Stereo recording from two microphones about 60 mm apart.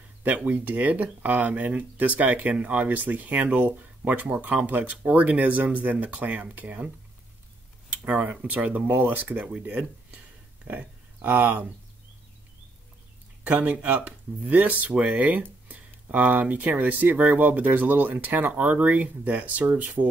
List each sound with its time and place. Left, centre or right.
0.4 s speech: right
8.0 s speech: right
13.4 s speech: right